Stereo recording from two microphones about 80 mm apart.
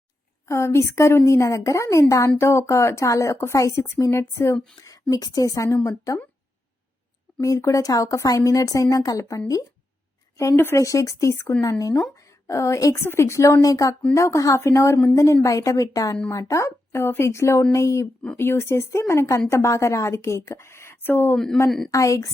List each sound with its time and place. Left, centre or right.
0.4 s a woman's voice: left
4.8 s a woman's voice: left
7.4 s a woman's voice: left
10.8 s a woman's voice: left
11.6 s a woman's voice: left
21.3 s speech: centre
21.8 s a woman's voice: left